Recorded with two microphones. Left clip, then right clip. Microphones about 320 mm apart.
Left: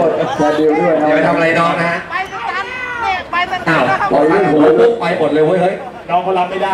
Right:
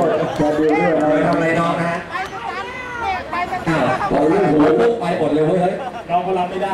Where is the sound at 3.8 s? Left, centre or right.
Centre.